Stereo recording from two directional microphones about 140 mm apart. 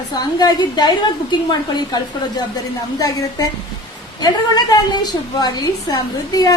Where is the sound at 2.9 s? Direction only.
25° left (ahead or behind).